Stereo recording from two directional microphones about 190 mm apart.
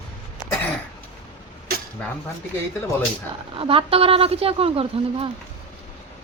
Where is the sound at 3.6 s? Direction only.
30° right (ahead or behind).